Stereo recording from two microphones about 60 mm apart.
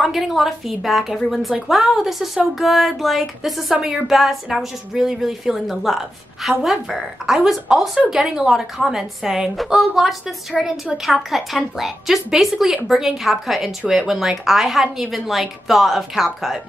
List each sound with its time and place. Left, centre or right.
0.0 s a woman's voice: centre